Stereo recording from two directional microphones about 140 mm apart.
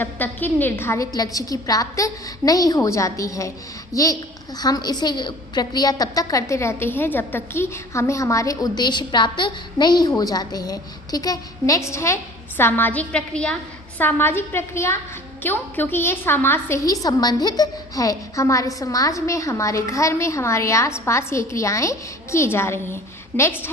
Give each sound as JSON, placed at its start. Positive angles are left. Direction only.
{"t": 0.0, "sound": "a woman's voice", "side_deg": 15}